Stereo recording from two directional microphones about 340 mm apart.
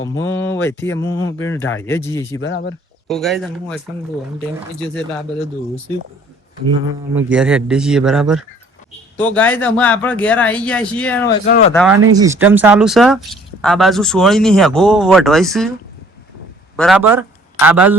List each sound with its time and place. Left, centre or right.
0.0 s speech: centre
2.4 s speech: left
3.1 s speech: centre
6.8 s speech: centre
11.4 s speech: left
11.7 s speech: centre
12.1 s speech: centre
16.7 s a man's voice: centre